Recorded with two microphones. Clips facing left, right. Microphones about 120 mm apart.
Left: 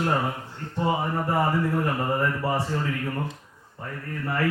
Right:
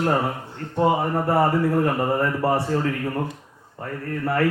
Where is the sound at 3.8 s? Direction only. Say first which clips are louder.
Right 6 dB; 60° right (ahead or behind).